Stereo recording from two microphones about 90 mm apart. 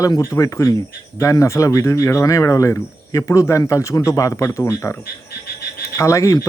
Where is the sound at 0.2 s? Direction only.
35° left (ahead or behind).